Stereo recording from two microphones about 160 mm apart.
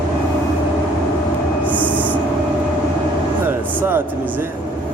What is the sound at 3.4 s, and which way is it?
Vehicle, 15° right (ahead or behind).